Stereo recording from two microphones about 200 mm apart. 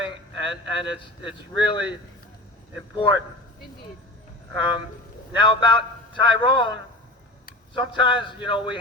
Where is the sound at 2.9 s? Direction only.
25° left (ahead or behind).